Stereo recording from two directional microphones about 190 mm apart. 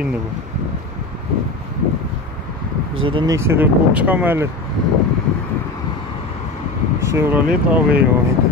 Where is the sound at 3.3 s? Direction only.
15° right (ahead or behind).